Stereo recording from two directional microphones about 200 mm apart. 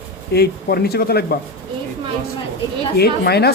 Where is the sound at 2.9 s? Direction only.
50° left (ahead or behind).